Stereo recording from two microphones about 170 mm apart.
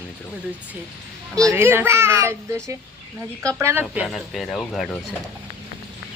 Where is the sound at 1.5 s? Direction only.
15° right (ahead or behind); by 5.0 s 5° left (ahead or behind).